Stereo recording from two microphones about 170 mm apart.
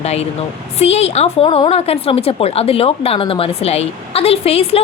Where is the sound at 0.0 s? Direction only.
40° left (ahead or behind).